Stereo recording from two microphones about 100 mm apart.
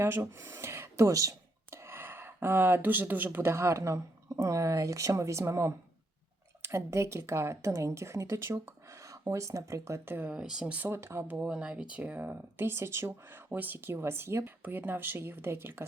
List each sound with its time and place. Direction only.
0.0 s speech: 25° right (ahead or behind)
10.8 s speech: 25° right (ahead or behind)
11.3 s speech: 10° right (ahead or behind)